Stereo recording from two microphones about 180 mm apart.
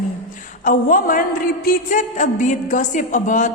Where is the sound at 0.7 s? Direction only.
50° left (ahead or behind).